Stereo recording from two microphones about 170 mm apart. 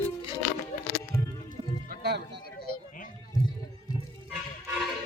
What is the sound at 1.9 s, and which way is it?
Music, 75° right (ahead or behind).